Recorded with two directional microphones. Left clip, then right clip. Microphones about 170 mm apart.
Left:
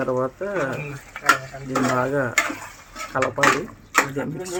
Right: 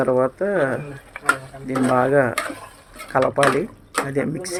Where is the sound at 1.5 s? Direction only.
10° right (ahead or behind).